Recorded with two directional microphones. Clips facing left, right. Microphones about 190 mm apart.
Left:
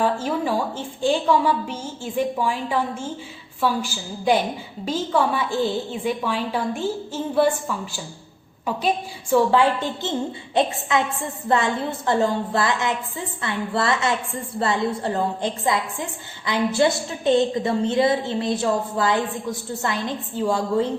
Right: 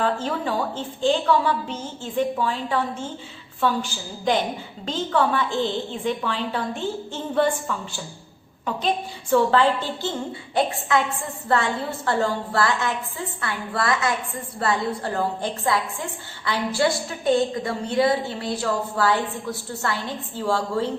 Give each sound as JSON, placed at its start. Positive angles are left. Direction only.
{"t": 0.0, "sound": "a woman's voice", "side_deg": 10}
{"t": 9.3, "sound": "a woman's voice", "side_deg": 15}